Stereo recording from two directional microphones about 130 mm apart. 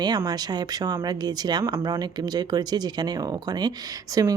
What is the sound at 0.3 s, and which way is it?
A woman's voice, 30° right (ahead or behind).